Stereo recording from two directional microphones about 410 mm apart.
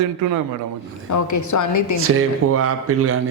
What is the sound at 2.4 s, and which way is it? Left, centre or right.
Speech, right.